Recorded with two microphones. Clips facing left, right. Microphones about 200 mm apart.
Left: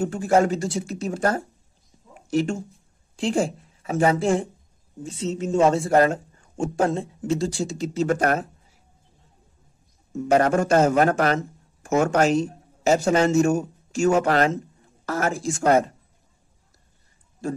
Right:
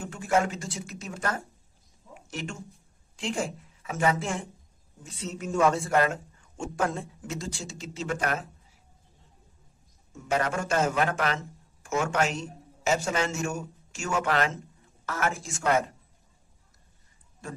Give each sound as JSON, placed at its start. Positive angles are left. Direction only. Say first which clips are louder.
{"t": 0.0, "sound": "a man's voice", "louder": "left 7 dB", "side_deg": 35}
{"t": 2.1, "sound": "a sound", "louder": "left 14 dB", "side_deg": 35}
{"t": 3.2, "sound": "a woman's voice", "louder": "left 8 dB", "side_deg": 35}
{"t": 6.8, "sound": "a man's voice", "louder": "left 6 dB", "side_deg": 25}
{"t": 10.2, "sound": "a man's voice", "louder": "left 9 dB", "side_deg": 45}